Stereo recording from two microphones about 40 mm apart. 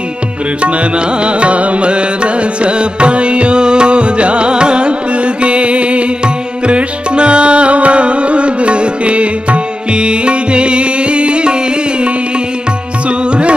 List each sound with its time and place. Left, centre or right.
0.6 s music: right
13.2 s music: right